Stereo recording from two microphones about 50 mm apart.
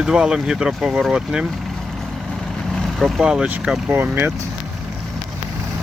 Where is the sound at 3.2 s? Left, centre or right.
Centre.